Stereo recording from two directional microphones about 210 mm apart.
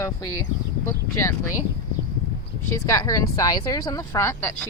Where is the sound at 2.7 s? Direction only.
15° left (ahead or behind).